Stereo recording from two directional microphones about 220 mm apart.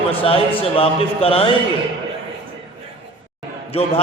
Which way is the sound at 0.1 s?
25° left (ahead or behind).